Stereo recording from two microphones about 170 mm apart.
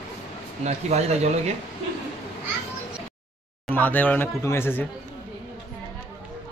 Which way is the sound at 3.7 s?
10° left (ahead or behind).